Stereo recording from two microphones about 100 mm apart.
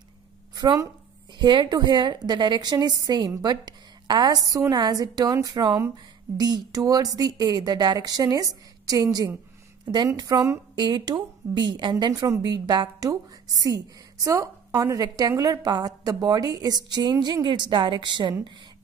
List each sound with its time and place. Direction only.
0.6 s a woman's voice: 40° right (ahead or behind)
10.8 s a woman's voice: 45° right (ahead or behind)
12.1 s a woman's voice: 30° right (ahead or behind)
12.4 s a woman's voice: 45° right (ahead or behind)